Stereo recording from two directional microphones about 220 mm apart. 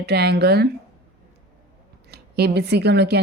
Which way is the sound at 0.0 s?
50° right (ahead or behind).